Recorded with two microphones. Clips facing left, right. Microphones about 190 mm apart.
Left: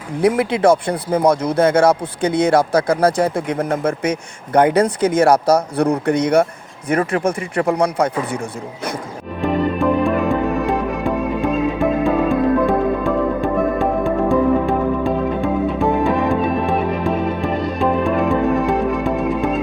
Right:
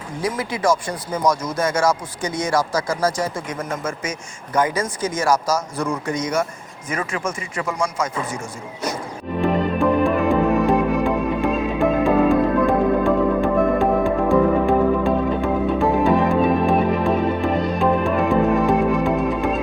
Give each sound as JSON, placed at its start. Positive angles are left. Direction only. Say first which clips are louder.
{"t": 0.2, "sound": "speech", "louder": "left 8 dB", "side_deg": 65}
{"t": 9.4, "sound": "music", "louder": "left 1 dB", "side_deg": 0}